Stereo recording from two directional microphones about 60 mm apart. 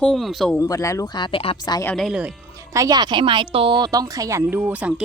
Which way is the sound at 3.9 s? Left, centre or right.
Right.